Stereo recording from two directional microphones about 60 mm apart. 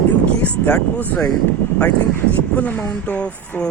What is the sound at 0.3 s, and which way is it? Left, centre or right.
Speech, left.